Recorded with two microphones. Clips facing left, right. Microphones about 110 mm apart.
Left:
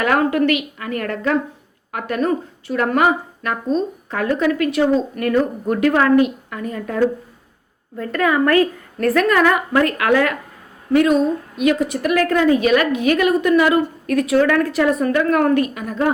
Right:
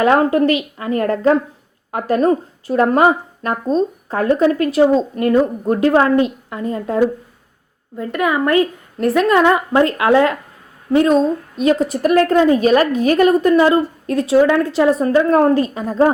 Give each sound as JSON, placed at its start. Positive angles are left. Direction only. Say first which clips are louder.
{"t": 0.0, "sound": "a woman's voice", "louder": "right 4 dB", "side_deg": -30}